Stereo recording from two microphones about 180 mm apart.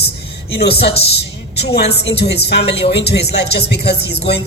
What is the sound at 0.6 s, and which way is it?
Speech, 65° left (ahead or behind).